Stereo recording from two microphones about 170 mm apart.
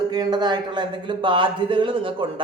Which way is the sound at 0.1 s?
25° right (ahead or behind).